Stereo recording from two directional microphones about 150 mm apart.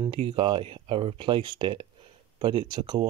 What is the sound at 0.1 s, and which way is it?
Speech, 35° right (ahead or behind).